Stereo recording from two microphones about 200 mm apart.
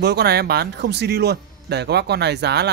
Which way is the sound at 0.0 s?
55° right (ahead or behind).